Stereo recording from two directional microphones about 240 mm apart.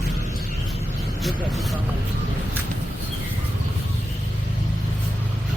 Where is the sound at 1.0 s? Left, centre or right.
Centre.